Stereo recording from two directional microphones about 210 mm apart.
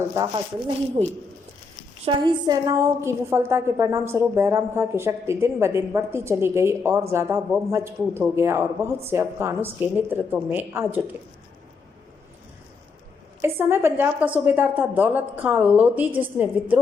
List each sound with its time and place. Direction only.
1.0 s a woman's voice: 30° right (ahead or behind)
2.0 s a woman's voice: 20° right (ahead or behind)
13.4 s a woman's voice: 10° right (ahead or behind)